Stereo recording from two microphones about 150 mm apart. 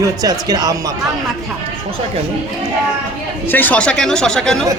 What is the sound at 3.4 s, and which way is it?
Speech, 10° left (ahead or behind).